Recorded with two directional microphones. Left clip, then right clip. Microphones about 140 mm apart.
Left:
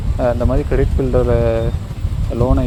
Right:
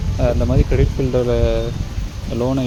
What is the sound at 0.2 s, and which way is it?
Speech, 5° right (ahead or behind).